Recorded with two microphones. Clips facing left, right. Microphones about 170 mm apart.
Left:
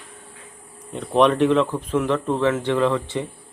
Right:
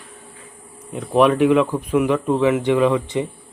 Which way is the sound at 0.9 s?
5° right (ahead or behind).